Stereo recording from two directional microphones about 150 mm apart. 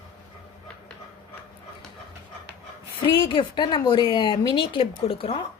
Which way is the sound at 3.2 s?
35° left (ahead or behind).